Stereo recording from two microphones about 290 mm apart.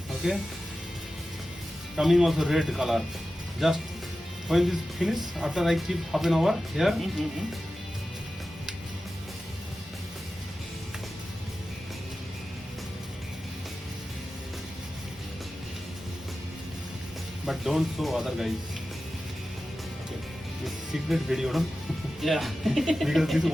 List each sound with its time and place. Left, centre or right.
0.2 s speech: centre
2.0 s speech: centre
17.4 s speech: centre
20.7 s speech: centre